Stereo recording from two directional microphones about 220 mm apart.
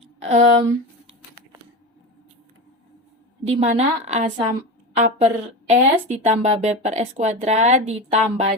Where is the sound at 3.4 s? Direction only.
30° right (ahead or behind).